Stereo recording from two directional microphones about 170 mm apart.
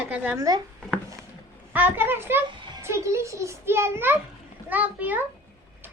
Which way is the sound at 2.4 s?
30° right (ahead or behind).